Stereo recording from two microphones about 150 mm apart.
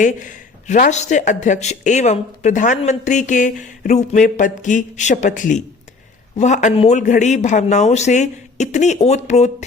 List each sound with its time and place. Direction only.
0.0 s speech: 60° left (ahead or behind)